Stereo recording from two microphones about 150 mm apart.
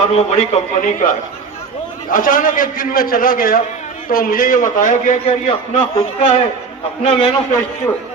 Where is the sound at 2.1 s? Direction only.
65° left (ahead or behind).